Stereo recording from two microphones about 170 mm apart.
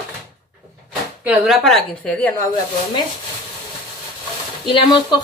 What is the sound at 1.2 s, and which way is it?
Speech, 5° right (ahead or behind).